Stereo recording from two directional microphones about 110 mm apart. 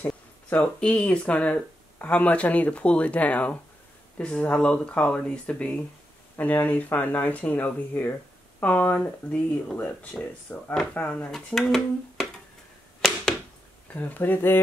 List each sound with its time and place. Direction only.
0.0 s speech: 10° left (ahead or behind)
13.9 s speech: 15° left (ahead or behind)